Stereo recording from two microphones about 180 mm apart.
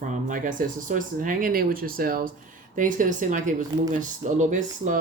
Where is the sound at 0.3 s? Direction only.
45° right (ahead or behind).